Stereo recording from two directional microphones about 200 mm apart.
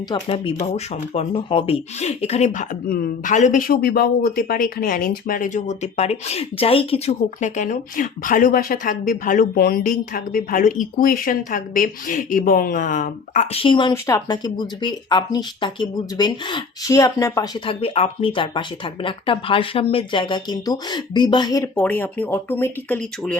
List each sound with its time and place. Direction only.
0.1 s speech: 30° left (ahead or behind); by 23.4 s 5° left (ahead or behind)